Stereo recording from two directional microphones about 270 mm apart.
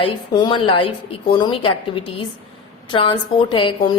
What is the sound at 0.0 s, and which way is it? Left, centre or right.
A woman's voice, centre.